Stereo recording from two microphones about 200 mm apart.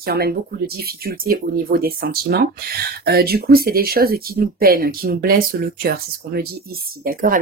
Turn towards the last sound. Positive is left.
turn(degrees=-45)  # may be behind; listen again after turning